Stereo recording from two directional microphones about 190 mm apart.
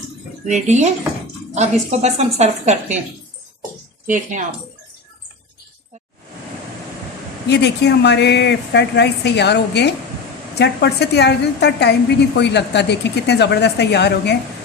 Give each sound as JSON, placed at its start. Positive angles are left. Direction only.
{"t": 0.4, "sound": "a woman's voice", "side_deg": -40}
{"t": 4.0, "sound": "a woman's voice", "side_deg": -40}
{"t": 7.5, "sound": "a woman's voice", "side_deg": 65}